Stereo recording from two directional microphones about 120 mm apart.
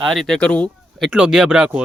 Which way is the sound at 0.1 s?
Centre (ahead or behind).